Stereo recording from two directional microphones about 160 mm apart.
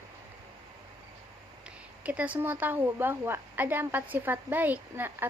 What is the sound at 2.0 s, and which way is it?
A woman's voice, 10° right (ahead or behind).